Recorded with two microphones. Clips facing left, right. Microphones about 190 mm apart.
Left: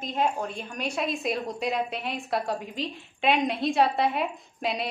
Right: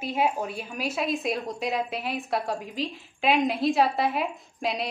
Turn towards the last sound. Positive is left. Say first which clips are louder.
# even
turn(degrees=0)  # may be behind; listen again after turning